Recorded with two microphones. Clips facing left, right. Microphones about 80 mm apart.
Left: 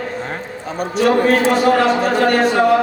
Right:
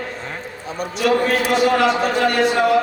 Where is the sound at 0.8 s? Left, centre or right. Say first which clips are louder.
Left 3 dB; left.